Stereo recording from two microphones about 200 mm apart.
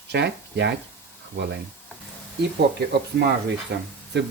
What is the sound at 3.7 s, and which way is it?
Speech, 55° right (ahead or behind).